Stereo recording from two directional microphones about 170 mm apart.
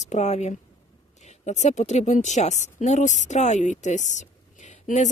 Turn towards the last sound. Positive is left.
turn(degrees=45)  # may be behind; listen again after turning